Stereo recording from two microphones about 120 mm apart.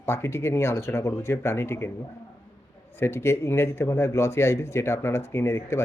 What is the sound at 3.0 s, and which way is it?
Speech, 20° left (ahead or behind).